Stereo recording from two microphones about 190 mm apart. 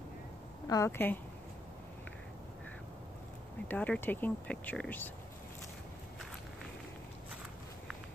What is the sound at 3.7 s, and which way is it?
Speech, 10° left (ahead or behind).